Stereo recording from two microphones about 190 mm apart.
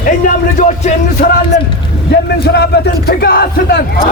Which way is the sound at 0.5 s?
35° left (ahead or behind).